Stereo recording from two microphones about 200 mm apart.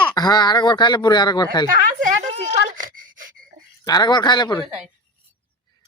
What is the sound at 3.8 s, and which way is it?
Speech, 20° left (ahead or behind).